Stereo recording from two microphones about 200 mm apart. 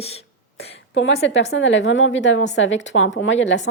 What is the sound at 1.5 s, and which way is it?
A woman's voice, 65° left (ahead or behind).